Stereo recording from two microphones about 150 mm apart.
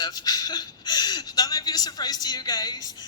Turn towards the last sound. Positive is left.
turn(degrees=25)  # may be behind; listen again after turning